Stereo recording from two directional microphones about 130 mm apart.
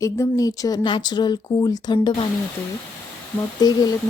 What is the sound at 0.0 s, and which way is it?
Speech, 25° left (ahead or behind).